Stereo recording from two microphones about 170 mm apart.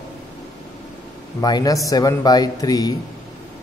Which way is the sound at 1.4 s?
20° left (ahead or behind).